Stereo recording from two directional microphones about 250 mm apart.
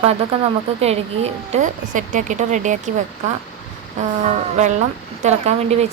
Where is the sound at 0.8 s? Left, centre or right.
Right.